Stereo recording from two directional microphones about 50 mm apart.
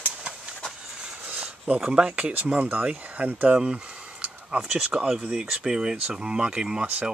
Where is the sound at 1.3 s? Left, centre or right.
Right.